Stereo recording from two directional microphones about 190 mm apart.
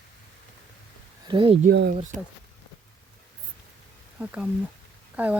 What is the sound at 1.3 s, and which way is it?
Speech, 25° right (ahead or behind).